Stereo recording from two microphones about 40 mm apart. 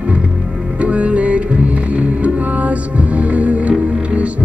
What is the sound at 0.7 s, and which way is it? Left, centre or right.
Music, right.